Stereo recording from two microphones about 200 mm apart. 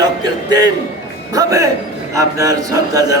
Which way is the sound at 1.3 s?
15° right (ahead or behind).